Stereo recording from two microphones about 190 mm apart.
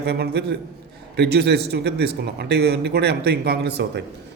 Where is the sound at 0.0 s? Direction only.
60° right (ahead or behind).